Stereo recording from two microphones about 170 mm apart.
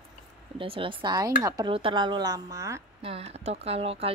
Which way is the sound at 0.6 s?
30° right (ahead or behind).